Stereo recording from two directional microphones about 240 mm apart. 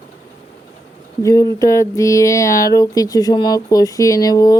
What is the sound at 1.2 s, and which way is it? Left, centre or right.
Speech, centre.